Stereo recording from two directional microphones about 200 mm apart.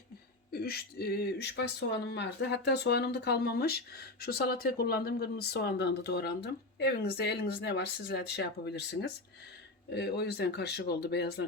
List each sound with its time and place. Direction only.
0.5 s speech: 50° left (ahead or behind)